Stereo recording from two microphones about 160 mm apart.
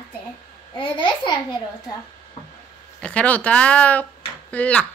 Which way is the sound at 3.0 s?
5° left (ahead or behind).